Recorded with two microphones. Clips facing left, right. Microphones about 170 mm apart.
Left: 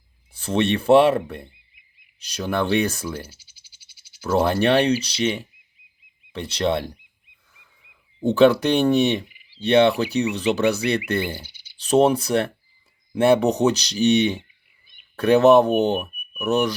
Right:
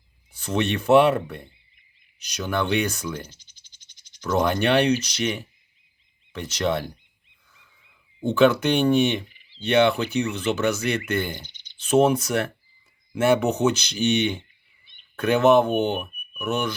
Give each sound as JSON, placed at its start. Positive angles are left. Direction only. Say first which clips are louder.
{"t": 0.3, "sound": "speech", "louder": "left 3 dB", "side_deg": 30}
{"t": 3.2, "sound": "frog", "louder": "left 2 dB", "side_deg": 10}
{"t": 4.3, "sound": "speech", "louder": "left 2 dB", "side_deg": 30}
{"t": 8.2, "sound": "speech", "louder": "left 3 dB", "side_deg": 35}
{"t": 11.3, "sound": "cricket", "louder": "left 2 dB", "side_deg": 10}
{"t": 11.8, "sound": "speech", "louder": "left 2 dB", "side_deg": 35}